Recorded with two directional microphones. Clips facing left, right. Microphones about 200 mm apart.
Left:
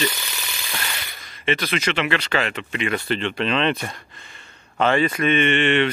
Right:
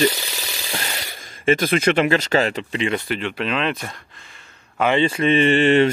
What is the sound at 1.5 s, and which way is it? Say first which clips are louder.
Speech: right 6 dB; 50° right (ahead or behind).